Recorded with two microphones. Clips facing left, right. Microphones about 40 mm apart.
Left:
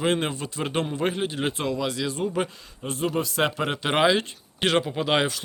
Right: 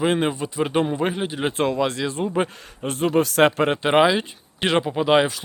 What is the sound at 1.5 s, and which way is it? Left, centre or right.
Speech, right.